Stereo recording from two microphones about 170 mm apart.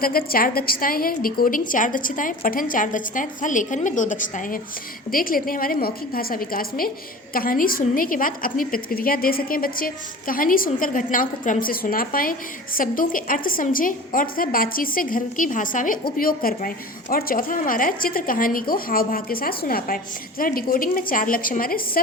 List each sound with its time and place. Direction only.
0.0 s a woman's voice: 60° left (ahead or behind)